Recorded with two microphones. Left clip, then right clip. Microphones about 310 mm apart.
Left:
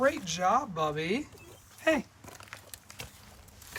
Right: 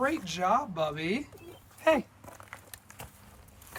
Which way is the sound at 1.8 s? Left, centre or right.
Centre.